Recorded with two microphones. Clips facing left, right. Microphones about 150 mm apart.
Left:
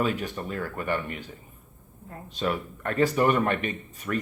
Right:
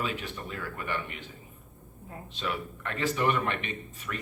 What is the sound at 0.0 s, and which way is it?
Speech, 45° left (ahead or behind).